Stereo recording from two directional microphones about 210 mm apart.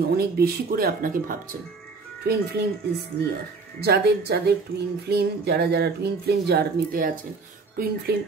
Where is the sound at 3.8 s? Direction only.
50° right (ahead or behind).